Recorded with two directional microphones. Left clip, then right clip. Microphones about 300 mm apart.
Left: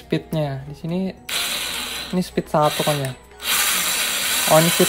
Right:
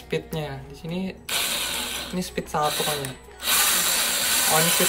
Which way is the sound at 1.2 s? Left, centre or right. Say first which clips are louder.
Left 1 dB; centre.